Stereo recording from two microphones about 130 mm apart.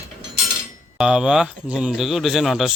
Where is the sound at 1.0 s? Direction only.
5° right (ahead or behind).